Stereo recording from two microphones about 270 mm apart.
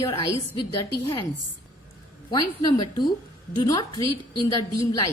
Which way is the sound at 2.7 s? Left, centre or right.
Centre.